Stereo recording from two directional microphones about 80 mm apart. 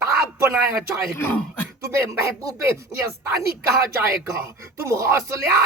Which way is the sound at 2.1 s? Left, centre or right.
Right.